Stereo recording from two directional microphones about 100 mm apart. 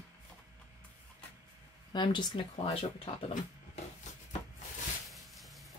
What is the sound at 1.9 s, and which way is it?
Speech, 50° left (ahead or behind).